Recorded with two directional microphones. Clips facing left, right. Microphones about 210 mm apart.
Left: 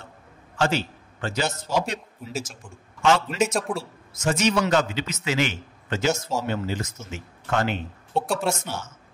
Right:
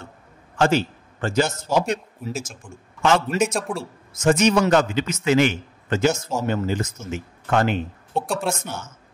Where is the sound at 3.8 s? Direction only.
50° right (ahead or behind).